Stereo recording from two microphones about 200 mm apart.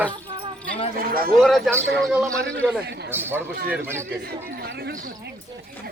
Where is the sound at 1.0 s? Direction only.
45° right (ahead or behind).